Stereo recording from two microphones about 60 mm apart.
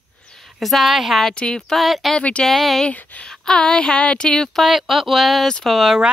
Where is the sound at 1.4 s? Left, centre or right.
Centre.